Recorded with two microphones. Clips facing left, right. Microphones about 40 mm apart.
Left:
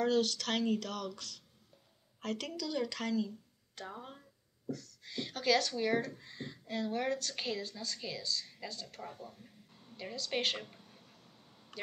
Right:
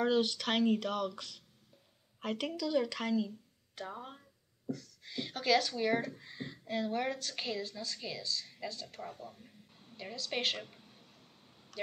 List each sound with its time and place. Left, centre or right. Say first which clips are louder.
0.0 s a woman's voice: right 1 dB; centre